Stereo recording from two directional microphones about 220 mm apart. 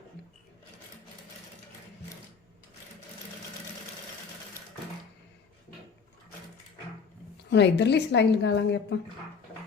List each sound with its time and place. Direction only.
7.5 s a woman's voice: 50° left (ahead or behind)